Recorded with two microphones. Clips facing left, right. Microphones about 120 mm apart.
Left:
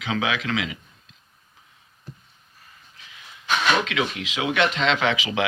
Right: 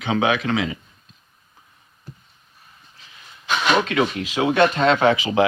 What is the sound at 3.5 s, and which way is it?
Speech, 40° right (ahead or behind).